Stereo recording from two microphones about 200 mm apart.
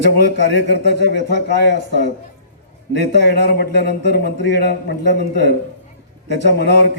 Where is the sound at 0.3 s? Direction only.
55° left (ahead or behind).